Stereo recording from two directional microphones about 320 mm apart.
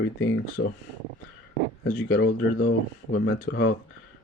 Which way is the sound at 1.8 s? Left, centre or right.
Left.